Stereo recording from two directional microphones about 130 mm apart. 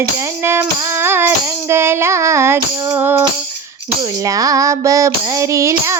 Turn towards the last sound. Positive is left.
turn(degrees=-20)  # may be behind; listen again after turning